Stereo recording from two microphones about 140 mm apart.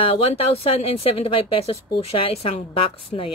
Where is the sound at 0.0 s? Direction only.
45° left (ahead or behind).